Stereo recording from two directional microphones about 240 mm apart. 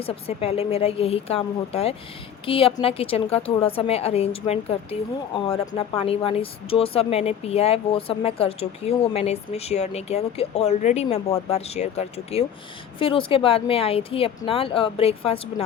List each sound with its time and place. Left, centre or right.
0.0 s a woman's voice: left